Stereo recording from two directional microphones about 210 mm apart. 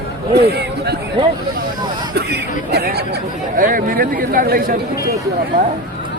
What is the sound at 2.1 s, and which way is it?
Speech, 50° right (ahead or behind).